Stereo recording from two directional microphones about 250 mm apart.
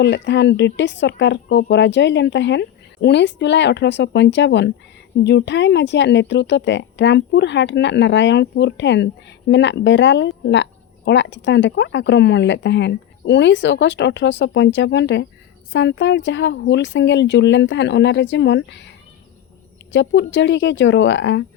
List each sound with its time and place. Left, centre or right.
0.0 s speech: left
19.9 s speech: left